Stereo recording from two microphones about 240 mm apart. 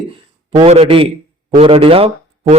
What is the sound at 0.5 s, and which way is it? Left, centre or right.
A man's voice, right.